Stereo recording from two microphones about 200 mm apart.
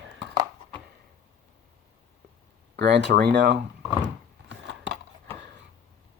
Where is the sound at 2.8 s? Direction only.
60° right (ahead or behind).